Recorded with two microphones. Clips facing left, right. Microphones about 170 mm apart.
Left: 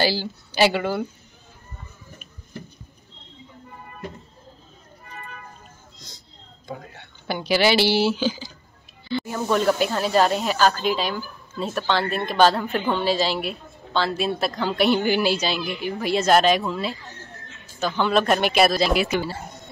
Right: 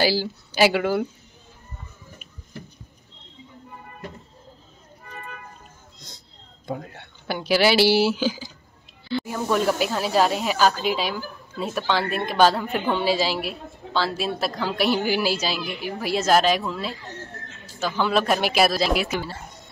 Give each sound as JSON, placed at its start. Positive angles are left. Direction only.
{"t": 0.0, "sound": "a woman's voice", "side_deg": -10}
{"t": 5.9, "sound": "music", "side_deg": 0}
{"t": 6.7, "sound": "speech", "side_deg": -60}
{"t": 7.2, "sound": "speech", "side_deg": -5}